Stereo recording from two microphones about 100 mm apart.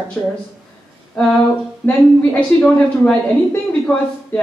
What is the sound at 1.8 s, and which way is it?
Speech, 10° left (ahead or behind).